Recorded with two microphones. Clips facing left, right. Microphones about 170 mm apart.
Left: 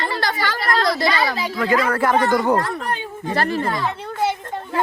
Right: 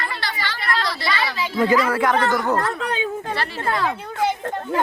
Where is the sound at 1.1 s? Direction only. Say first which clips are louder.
Left 3 dB; 40° left (ahead or behind).